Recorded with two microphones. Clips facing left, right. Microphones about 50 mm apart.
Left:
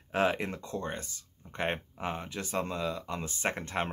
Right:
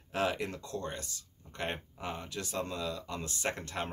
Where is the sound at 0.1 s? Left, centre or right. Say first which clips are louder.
Left 4 dB; left.